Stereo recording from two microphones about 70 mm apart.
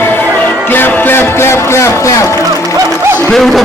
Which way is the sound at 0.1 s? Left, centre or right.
Left.